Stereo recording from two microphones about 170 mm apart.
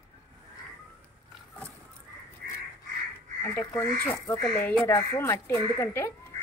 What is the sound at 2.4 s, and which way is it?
Duck, 65° right (ahead or behind).